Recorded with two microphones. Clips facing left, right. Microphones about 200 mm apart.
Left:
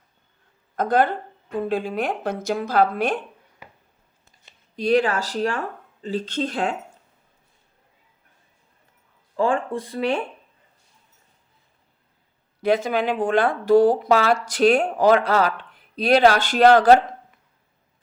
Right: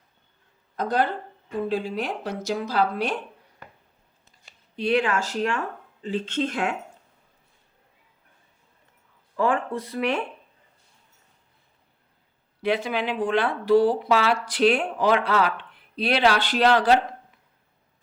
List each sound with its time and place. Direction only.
0.8 s speech: 50° left (ahead or behind)
4.8 s speech: 40° left (ahead or behind)
9.3 s speech: 30° left (ahead or behind)
12.6 s speech: 45° left (ahead or behind)